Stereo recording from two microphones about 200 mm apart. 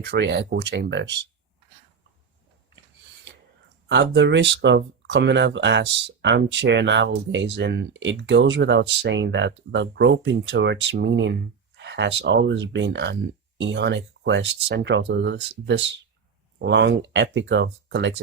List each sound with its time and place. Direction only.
0.0 s speech: 55° right (ahead or behind)
3.8 s speech: 60° right (ahead or behind)